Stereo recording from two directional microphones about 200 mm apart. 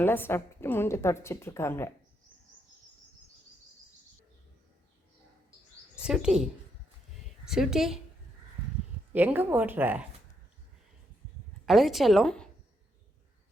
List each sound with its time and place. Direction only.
0.0 s a woman's voice: 10° left (ahead or behind)
6.0 s a woman's voice: 5° right (ahead or behind)
9.1 s speech: 10° right (ahead or behind)
11.6 s a woman's voice: centre (ahead or behind)